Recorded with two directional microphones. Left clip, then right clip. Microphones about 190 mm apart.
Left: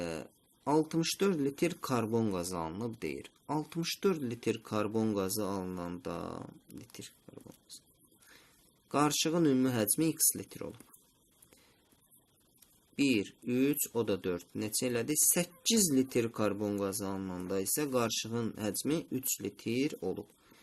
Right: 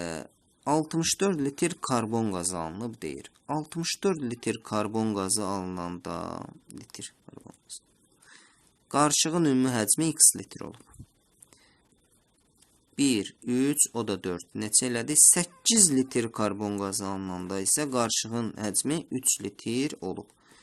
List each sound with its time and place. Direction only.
0.0 s speech: 35° right (ahead or behind)
8.9 s speech: 35° right (ahead or behind)
13.0 s speech: 40° right (ahead or behind)